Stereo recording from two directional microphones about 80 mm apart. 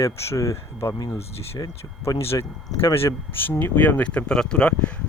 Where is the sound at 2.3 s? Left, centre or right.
Left; by 4.9 s centre.